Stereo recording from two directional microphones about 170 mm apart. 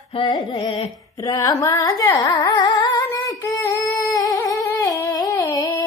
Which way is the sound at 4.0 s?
20° left (ahead or behind).